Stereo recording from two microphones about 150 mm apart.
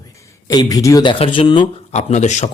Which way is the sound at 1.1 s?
35° left (ahead or behind).